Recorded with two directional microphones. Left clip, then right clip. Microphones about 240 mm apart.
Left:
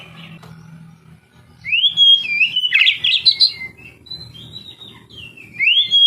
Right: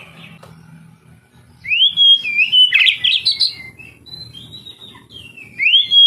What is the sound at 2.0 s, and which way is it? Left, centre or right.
Alarm, centre.